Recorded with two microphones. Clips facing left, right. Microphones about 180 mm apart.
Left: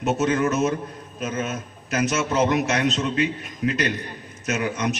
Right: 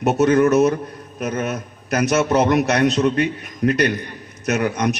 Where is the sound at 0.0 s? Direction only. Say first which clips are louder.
Right 6 dB; 65° right (ahead or behind).